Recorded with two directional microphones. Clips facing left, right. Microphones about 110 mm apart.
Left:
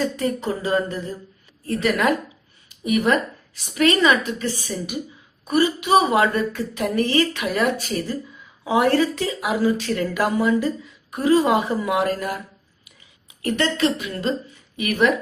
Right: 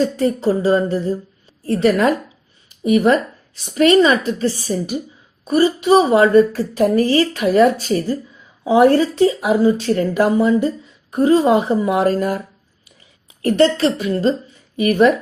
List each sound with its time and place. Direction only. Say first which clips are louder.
0.2 s a woman's voice: right 7 dB; 30° right (ahead or behind)
13.4 s speech: right 7 dB; 35° right (ahead or behind)